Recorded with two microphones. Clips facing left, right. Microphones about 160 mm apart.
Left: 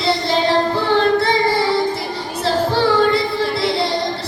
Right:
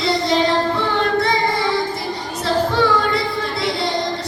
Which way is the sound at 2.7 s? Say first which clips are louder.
Left 3 dB; 30° left (ahead or behind).